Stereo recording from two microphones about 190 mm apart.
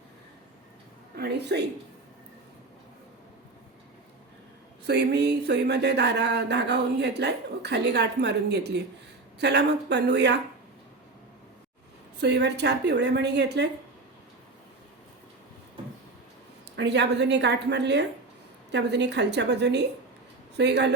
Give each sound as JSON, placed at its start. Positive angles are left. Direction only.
{"t": 1.1, "sound": "a woman's voice", "side_deg": -60}
{"t": 4.9, "sound": "speech", "side_deg": -60}
{"t": 12.2, "sound": "speech", "side_deg": -65}
{"t": 16.7, "sound": "speech", "side_deg": -65}